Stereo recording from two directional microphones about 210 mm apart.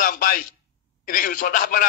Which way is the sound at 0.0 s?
40° left (ahead or behind).